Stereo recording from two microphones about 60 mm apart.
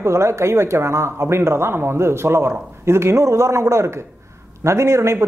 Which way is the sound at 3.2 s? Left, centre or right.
Right.